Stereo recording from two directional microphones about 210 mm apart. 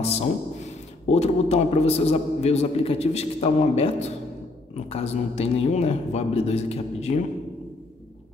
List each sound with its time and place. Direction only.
0.0 s a man's voice: 30° left (ahead or behind)